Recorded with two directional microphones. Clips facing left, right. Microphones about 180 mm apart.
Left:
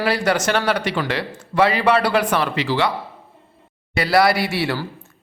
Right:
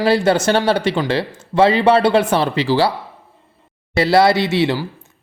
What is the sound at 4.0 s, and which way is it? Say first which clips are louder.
Speech: right 4 dB; 25° right (ahead or behind).